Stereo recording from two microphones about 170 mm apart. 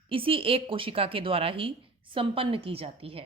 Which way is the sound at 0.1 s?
30° right (ahead or behind).